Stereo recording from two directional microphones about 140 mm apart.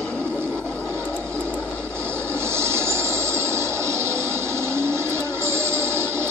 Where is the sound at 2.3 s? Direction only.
20° right (ahead or behind).